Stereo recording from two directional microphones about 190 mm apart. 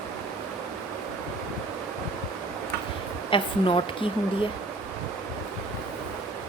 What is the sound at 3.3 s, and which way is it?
Speech, 25° left (ahead or behind).